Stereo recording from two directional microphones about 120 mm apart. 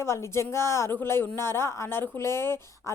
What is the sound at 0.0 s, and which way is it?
A woman's voice, 20° left (ahead or behind).